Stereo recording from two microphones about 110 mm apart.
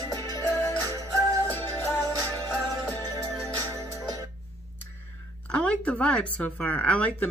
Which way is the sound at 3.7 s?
30° right (ahead or behind).